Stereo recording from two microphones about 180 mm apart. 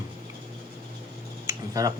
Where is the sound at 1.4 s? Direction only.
20° right (ahead or behind).